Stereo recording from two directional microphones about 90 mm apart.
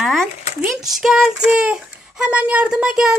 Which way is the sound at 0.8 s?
5° right (ahead or behind).